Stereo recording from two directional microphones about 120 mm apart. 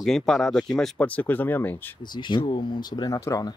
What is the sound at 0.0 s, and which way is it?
Speech, 5° left (ahead or behind).